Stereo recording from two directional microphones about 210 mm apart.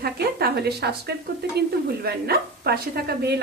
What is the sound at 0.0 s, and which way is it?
Speech, 50° right (ahead or behind).